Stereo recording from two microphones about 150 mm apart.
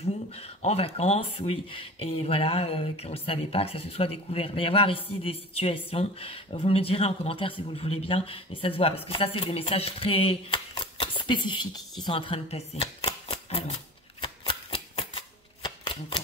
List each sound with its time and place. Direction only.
0.0 s speech: 45° left (ahead or behind)
12.0 s a sound: 35° left (ahead or behind)
14.2 s shuffling cards: 35° left (ahead or behind)